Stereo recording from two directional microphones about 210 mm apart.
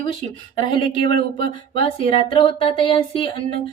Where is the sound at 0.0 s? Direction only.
25° left (ahead or behind).